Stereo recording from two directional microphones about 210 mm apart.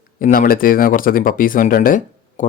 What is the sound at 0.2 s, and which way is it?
Speech, 40° left (ahead or behind).